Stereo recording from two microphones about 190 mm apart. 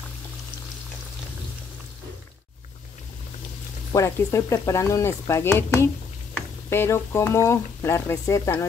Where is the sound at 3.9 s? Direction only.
15° left (ahead or behind).